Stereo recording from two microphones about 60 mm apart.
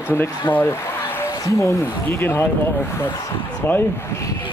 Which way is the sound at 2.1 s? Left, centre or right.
Left.